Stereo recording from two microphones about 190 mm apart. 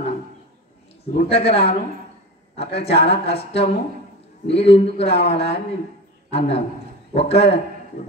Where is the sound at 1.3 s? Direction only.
30° left (ahead or behind).